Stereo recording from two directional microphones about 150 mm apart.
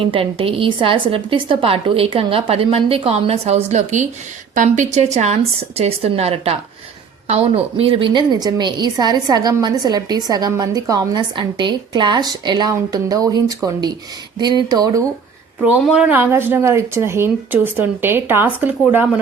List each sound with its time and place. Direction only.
0.0 s a woman's voice: 35° right (ahead or behind)
15.9 s a woman's voice: 5° right (ahead or behind)